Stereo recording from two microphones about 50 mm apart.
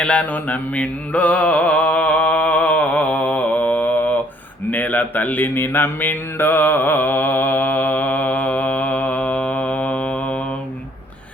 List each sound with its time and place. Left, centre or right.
0.0 s mantra: left